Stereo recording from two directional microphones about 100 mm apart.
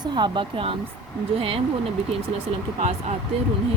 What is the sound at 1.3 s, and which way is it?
Speech, 75° right (ahead or behind).